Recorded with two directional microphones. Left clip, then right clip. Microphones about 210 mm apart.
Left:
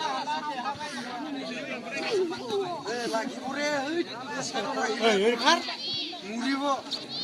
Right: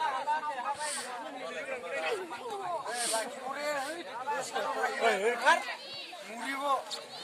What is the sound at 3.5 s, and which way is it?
Speech, 20° right (ahead or behind).